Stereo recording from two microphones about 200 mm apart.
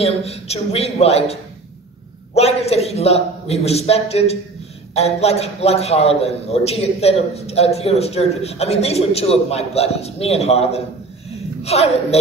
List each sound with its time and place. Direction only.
0.0 s a man's voice: 30° left (ahead or behind)